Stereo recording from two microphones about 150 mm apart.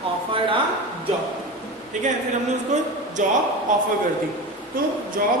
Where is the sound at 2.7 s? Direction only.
50° right (ahead or behind).